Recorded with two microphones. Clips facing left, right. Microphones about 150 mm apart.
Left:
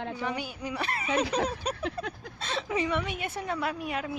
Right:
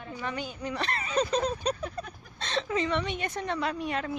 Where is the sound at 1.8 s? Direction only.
80° left.